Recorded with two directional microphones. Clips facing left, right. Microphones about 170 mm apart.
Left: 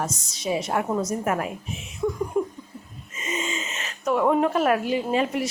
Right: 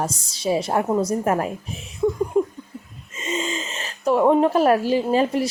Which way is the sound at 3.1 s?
30° right (ahead or behind).